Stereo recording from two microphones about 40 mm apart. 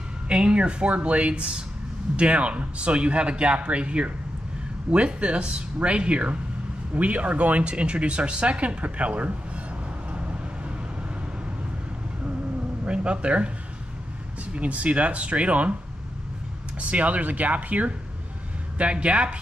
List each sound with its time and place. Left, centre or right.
0.3 s speech: right
12.8 s speech: right
14.5 s speech: right
16.9 s speech: right